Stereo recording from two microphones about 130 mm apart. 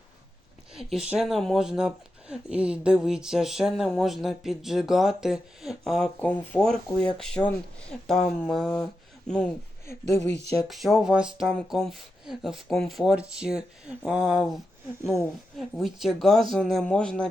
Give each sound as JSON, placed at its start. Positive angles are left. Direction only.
{"t": 0.7, "sound": "a sound", "side_deg": -5}
{"t": 1.2, "sound": "speech", "side_deg": 0}
{"t": 6.1, "sound": "speech", "side_deg": 10}
{"t": 9.8, "sound": "speech", "side_deg": 20}
{"t": 10.7, "sound": "speech", "side_deg": 0}